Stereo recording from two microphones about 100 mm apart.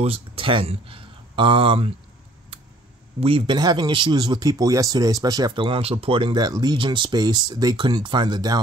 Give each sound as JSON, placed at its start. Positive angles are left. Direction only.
{"t": 0.0, "sound": "speech", "side_deg": -65}
{"t": 3.2, "sound": "speech", "side_deg": -70}
{"t": 3.5, "sound": "speech", "side_deg": -45}
{"t": 4.5, "sound": "speech", "side_deg": -35}
{"t": 5.5, "sound": "speech", "side_deg": -55}
{"t": 6.3, "sound": "speech", "side_deg": -45}